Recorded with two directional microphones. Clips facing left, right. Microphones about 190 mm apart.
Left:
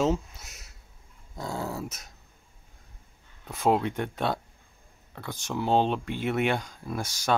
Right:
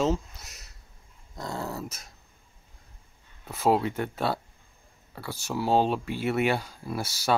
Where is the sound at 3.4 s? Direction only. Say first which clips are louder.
Right 1 dB; 5° right (ahead or behind).